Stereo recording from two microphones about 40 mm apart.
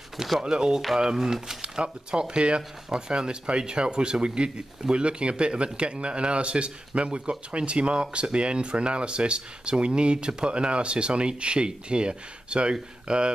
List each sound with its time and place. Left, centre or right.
0.4 s speech: centre